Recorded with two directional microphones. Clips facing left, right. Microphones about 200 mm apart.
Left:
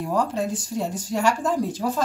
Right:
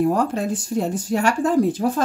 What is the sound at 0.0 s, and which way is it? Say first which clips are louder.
Speech: right 4 dB; 55° right (ahead or behind).